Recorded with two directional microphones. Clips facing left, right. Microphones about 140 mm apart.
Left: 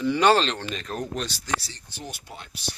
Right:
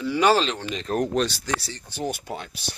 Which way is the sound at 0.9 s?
75° right (ahead or behind).